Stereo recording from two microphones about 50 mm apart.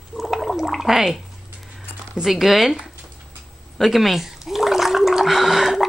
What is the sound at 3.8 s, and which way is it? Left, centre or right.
Gargling, centre.